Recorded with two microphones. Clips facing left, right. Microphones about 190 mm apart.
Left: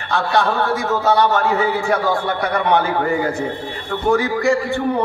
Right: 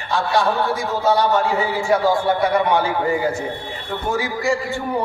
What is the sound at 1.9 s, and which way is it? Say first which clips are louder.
Speech: right 2 dB; 60° left (ahead or behind).